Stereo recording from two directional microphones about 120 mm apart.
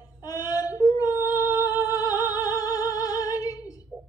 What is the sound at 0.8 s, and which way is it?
Yodeling, 30° left (ahead or behind).